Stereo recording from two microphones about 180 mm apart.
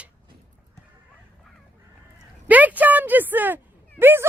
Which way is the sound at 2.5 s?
10° right (ahead or behind).